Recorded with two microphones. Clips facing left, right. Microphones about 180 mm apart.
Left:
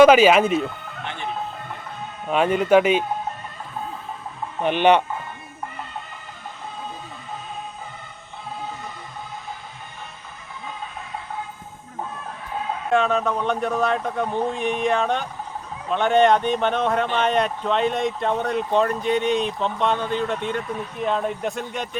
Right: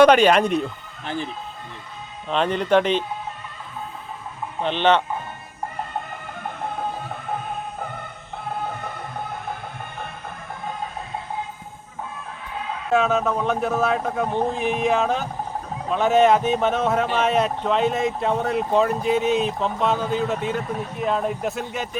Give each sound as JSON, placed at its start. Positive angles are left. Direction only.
{"t": 0.0, "sound": "speech", "side_deg": 5}
{"t": 1.0, "sound": "speech", "side_deg": -35}
{"t": 2.3, "sound": "speech", "side_deg": 10}
{"t": 4.6, "sound": "speech", "side_deg": 15}
{"t": 6.4, "sound": "music", "side_deg": -60}
{"t": 12.9, "sound": "speech", "side_deg": -5}